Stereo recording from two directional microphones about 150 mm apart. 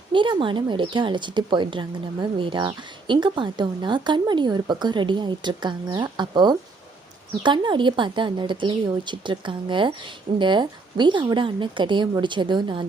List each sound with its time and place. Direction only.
0.1 s speech: 35° right (ahead or behind)